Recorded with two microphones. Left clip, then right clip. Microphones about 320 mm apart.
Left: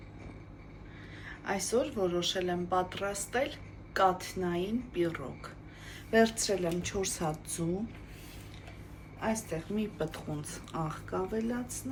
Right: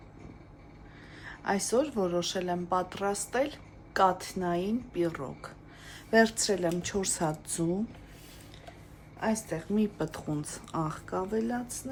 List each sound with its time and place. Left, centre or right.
1.2 s speech: right
9.2 s speech: right